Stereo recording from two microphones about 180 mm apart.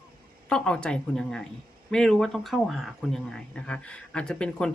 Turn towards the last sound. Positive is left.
turn(degrees=5)  # may be behind; listen again after turning